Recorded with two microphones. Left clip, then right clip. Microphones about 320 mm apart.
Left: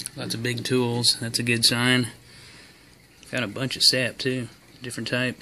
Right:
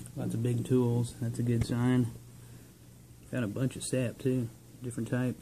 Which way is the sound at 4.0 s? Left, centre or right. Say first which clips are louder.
Left 7 dB; left.